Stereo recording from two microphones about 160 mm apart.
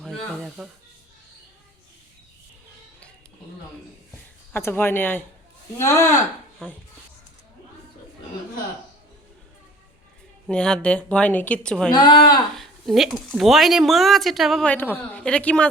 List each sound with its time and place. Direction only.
0.0 s speech: centre (ahead or behind)
4.5 s speech: 15° left (ahead or behind)
6.6 s speech: 5° left (ahead or behind)
10.5 s speech: 5° left (ahead or behind)
11.9 s speech: 30° left (ahead or behind)
12.5 s speech: centre (ahead or behind)